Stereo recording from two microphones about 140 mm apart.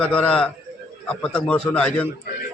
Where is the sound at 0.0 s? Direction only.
10° left (ahead or behind).